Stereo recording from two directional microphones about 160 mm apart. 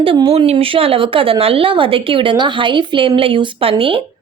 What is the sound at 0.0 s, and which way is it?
Speech, 35° right (ahead or behind).